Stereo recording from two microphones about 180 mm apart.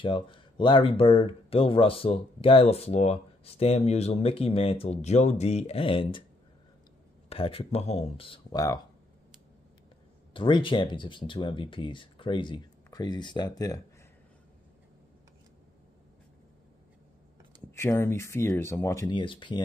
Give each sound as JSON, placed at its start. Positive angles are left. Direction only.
{"t": 0.0, "sound": "speech", "side_deg": 25}
{"t": 7.2, "sound": "speech", "side_deg": 30}
{"t": 10.3, "sound": "speech", "side_deg": 30}
{"t": 17.6, "sound": "speech", "side_deg": 15}